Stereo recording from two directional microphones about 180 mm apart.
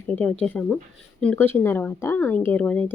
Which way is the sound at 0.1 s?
5° left (ahead or behind).